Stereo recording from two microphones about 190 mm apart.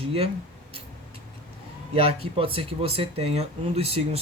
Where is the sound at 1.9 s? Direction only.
30° right (ahead or behind).